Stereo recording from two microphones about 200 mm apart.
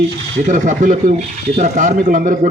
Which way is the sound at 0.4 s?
40° right (ahead or behind).